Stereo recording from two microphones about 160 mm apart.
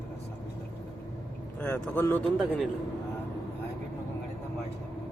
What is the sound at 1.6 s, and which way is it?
Speech, 10° left (ahead or behind).